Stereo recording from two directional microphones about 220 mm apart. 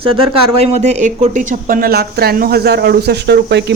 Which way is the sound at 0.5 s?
30° right (ahead or behind).